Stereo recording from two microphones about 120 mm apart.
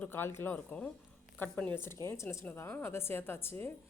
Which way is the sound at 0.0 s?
20° left (ahead or behind).